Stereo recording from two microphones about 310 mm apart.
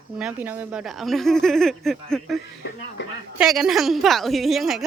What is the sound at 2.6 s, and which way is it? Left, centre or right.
Speech, left.